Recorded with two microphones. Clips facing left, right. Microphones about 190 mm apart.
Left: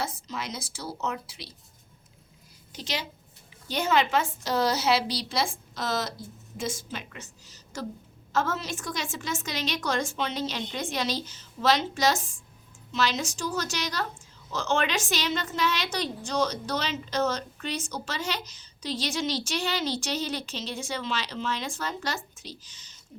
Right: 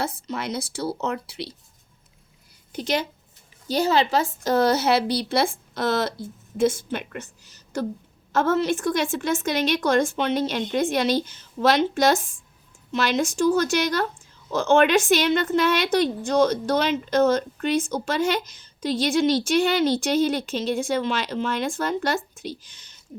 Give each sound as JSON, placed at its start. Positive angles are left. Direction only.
{"t": 0.0, "sound": "a woman's voice", "side_deg": -60}
{"t": 2.7, "sound": "a woman's voice", "side_deg": -55}
{"t": 3.7, "sound": "a woman's voice", "side_deg": -35}
{"t": 4.4, "sound": "a woman's voice", "side_deg": -55}